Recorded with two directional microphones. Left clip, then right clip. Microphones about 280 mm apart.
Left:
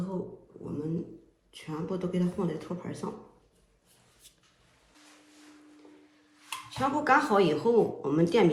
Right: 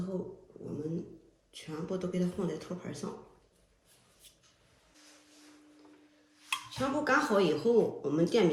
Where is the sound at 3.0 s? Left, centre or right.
Left.